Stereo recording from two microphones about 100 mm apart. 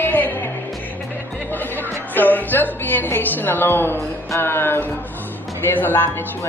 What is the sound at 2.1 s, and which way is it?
Speech, 20° left (ahead or behind).